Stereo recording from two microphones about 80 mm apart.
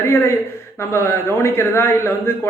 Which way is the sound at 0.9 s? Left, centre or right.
Left.